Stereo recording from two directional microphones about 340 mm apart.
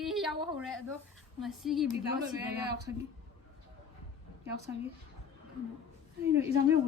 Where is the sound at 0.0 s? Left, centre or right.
Centre.